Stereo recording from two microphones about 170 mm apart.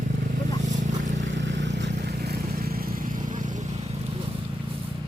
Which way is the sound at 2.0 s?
70° right (ahead or behind).